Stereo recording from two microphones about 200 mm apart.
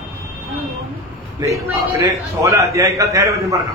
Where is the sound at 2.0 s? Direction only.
15° right (ahead or behind).